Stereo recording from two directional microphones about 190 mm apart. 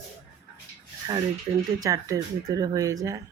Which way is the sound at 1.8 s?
20° right (ahead or behind).